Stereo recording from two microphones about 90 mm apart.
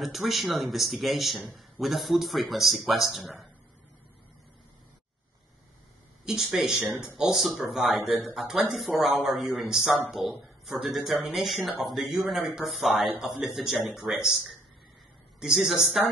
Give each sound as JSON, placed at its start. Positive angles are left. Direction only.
{"t": 0.0, "sound": "speech", "side_deg": 0}
{"t": 6.2, "sound": "speech", "side_deg": -5}